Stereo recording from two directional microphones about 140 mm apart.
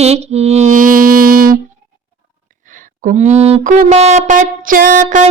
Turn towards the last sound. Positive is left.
turn(degrees=-65)  # may be behind; listen again after turning